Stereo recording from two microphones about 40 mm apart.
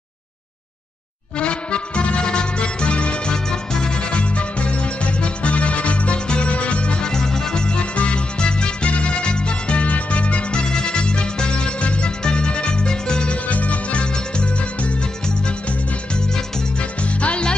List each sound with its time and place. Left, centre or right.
1.4 s music: left
3.4 s music: centre
13.5 s music: left
17.2 s music: left